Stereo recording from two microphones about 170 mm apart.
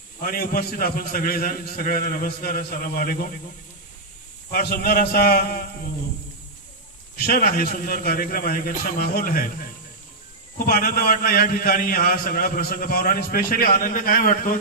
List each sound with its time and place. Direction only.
0.2 s a man's voice: 60° left (ahead or behind)
4.5 s a man's voice: 65° left (ahead or behind)
7.2 s a man's voice: 60° left (ahead or behind)
10.7 s a man's voice: 60° left (ahead or behind)